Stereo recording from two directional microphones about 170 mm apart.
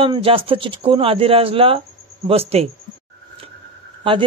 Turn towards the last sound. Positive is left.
turn(degrees=-30)  # may be behind; listen again after turning